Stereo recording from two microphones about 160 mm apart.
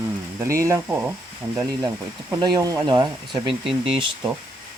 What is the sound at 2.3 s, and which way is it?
Speech, 20° right (ahead or behind).